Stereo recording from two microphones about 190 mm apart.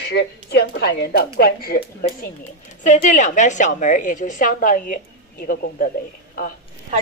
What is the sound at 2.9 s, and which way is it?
A woman's voice, 40° left (ahead or behind).